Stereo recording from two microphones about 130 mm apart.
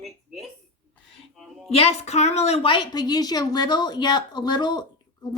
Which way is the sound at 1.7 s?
50° left (ahead or behind).